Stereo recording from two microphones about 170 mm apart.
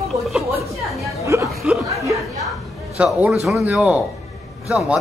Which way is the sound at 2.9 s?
5° right (ahead or behind).